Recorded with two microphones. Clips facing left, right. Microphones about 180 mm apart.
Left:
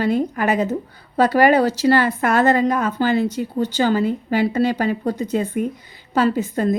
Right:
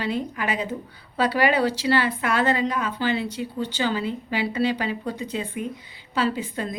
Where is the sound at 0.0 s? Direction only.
45° left (ahead or behind).